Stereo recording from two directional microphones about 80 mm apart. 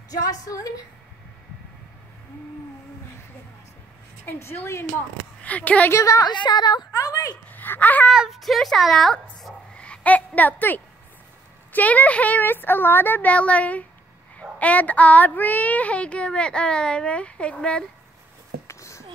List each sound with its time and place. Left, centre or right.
0.1 s a woman's voice: left
4.3 s speech: left
5.4 s a woman's voice: centre
5.9 s a woman's voice: left
6.2 s speech: left
6.9 s a woman's voice: left
7.4 s speech: left
8.1 s speech: centre
18.7 s a sound: left